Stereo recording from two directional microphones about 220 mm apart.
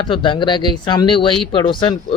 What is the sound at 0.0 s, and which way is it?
Speech, 20° left (ahead or behind).